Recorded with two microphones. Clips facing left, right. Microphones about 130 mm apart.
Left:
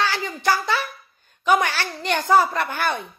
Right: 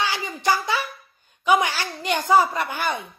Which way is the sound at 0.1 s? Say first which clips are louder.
Left 1 dB; 15° right (ahead or behind).